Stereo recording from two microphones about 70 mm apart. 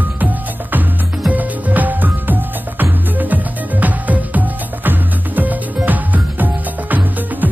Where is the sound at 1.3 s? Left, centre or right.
Right.